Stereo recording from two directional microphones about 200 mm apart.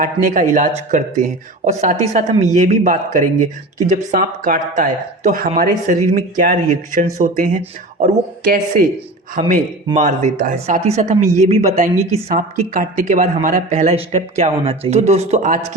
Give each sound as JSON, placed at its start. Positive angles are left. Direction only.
{"t": 0.0, "sound": "speech", "side_deg": -40}